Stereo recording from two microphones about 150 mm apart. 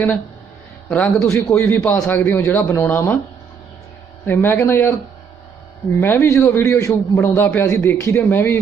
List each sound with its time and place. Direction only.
0.9 s a man's voice: 10° left (ahead or behind)
1.3 s a man's voice: 20° left (ahead or behind)
4.3 s a man's voice: 15° left (ahead or behind)
6.0 s a man's voice: 15° left (ahead or behind)